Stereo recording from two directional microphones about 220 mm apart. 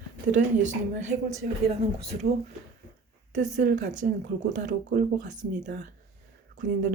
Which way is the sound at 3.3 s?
35° right (ahead or behind).